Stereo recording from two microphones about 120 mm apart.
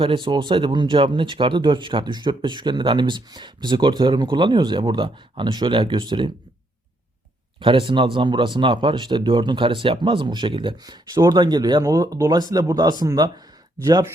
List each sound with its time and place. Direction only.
0.0 s speech: 45° right (ahead or behind)
7.6 s speech: 45° right (ahead or behind)